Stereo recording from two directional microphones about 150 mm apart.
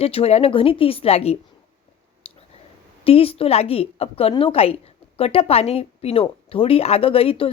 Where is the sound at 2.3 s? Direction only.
40° left (ahead or behind).